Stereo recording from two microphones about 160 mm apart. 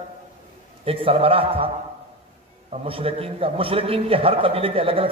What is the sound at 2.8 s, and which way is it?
A man's voice, 35° right (ahead or behind).